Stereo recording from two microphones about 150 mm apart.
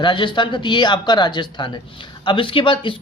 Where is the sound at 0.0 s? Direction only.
30° left (ahead or behind).